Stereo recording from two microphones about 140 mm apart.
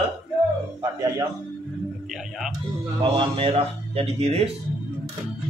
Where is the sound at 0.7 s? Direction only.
25° right (ahead or behind).